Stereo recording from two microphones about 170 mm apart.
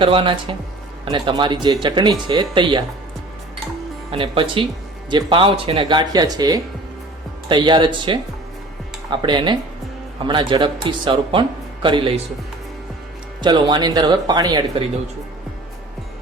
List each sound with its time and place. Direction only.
0.0 s speech: 30° right (ahead or behind)
4.1 s speech: 30° right (ahead or behind)
13.4 s speech: 25° right (ahead or behind)